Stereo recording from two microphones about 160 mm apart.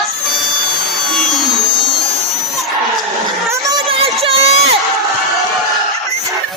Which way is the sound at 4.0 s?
35° right (ahead or behind).